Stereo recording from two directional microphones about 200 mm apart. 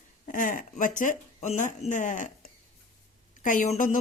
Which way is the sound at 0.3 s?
40° left (ahead or behind).